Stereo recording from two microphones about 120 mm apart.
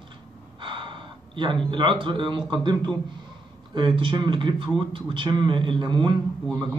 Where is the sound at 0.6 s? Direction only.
45° right (ahead or behind).